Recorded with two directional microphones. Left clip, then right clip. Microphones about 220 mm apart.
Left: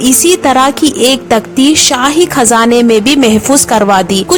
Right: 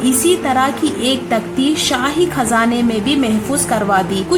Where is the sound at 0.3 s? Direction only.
50° left (ahead or behind).